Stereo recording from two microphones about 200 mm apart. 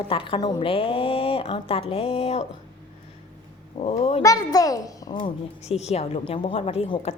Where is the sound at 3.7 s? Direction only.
30° left (ahead or behind).